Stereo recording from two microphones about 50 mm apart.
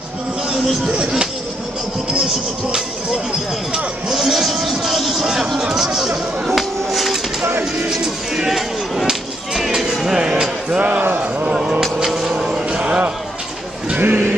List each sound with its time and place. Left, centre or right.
0.9 s speech: centre
4.1 s speech: centre
6.9 s bird: centre
8.0 s music: centre
9.0 s a sound: centre
12.3 s music: centre
14.0 s a sound: right